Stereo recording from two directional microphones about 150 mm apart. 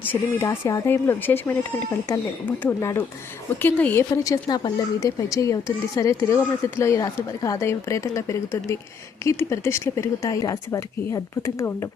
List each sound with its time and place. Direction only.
0.0 s speech: 15° left (ahead or behind)
4.1 s a woman's voice: 25° left (ahead or behind)